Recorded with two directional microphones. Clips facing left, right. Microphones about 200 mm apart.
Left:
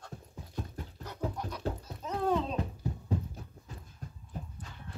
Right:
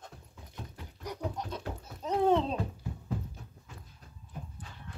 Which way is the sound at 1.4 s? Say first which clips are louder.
Left 3 dB; 25° right (ahead or behind).